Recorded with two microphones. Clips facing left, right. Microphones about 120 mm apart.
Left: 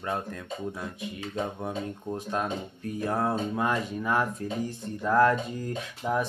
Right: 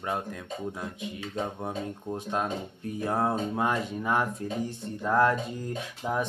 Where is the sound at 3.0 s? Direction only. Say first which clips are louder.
Even; 25° right (ahead or behind).